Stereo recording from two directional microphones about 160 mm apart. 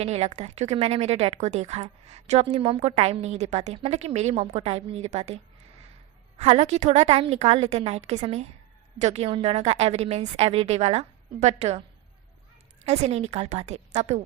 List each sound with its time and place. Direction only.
0.0 s a woman's voice: 40° right (ahead or behind)
6.4 s a woman's voice: 40° right (ahead or behind)
12.8 s a woman's voice: 40° right (ahead or behind)